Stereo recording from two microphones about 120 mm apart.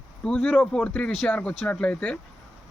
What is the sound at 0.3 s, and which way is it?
Speech, 10° left (ahead or behind).